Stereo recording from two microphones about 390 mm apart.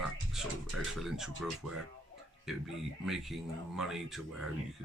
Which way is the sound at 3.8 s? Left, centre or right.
Centre.